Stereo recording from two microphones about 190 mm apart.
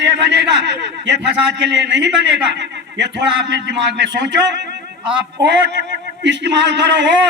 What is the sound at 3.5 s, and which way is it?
A man's voice, 65° right (ahead or behind).